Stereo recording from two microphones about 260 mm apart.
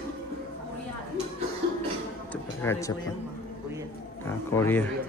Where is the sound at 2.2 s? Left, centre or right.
Centre.